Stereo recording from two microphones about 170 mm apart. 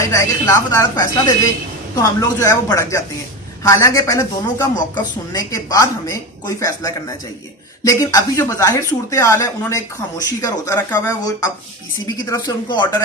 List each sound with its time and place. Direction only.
0.1 s speech: 20° left (ahead or behind)